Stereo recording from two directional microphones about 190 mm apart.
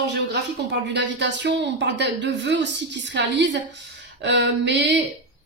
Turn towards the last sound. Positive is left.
turn(degrees=-65)  # may be behind; listen again after turning